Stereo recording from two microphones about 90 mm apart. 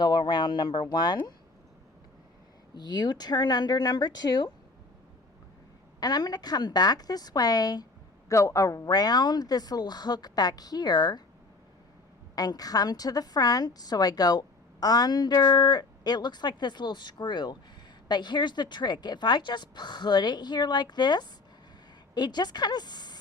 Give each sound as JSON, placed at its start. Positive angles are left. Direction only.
{"t": 0.0, "sound": "a woman's voice", "side_deg": 50}
{"t": 2.7, "sound": "a woman's voice", "side_deg": 50}
{"t": 6.0, "sound": "a woman's voice", "side_deg": 50}
{"t": 8.3, "sound": "a woman's voice", "side_deg": 35}
{"t": 12.4, "sound": "a woman's voice", "side_deg": 45}